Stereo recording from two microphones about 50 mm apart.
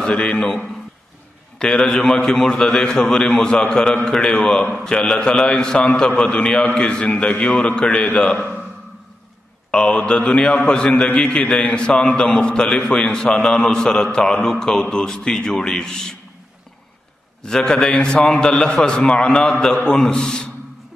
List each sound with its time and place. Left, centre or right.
0.0 s a man's voice: left
1.6 s a man's voice: centre
9.7 s a man's voice: left
17.4 s a man's voice: centre